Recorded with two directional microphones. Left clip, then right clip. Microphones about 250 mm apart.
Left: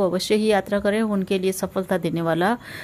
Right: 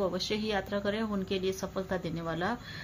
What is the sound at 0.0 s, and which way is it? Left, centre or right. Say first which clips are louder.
A woman's voice: left 11 dB; left.